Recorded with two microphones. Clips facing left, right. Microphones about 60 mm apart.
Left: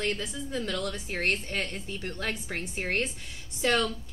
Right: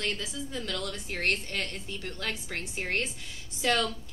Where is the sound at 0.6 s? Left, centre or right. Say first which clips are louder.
Left 3 dB; centre.